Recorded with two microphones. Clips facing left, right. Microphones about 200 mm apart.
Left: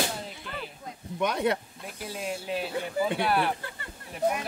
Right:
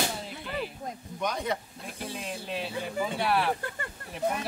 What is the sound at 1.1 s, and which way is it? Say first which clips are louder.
Speech: left 5 dB; 65° left (ahead or behind).